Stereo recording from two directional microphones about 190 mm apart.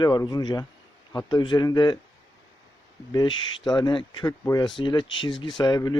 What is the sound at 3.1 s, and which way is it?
Speech, 20° left (ahead or behind).